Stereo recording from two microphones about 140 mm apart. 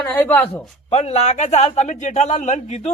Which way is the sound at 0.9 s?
50° left (ahead or behind).